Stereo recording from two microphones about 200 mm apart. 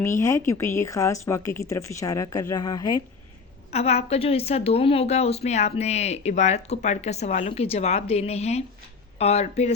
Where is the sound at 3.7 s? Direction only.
30° left (ahead or behind).